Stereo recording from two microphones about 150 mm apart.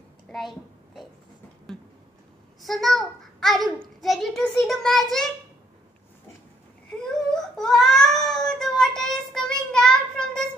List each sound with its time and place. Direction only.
0.3 s a sound: centre (ahead or behind)
2.6 s a child's voice: centre (ahead or behind)
7.1 s speech: 5° left (ahead or behind)